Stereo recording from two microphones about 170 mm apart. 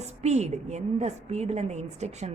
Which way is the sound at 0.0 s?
40° right (ahead or behind).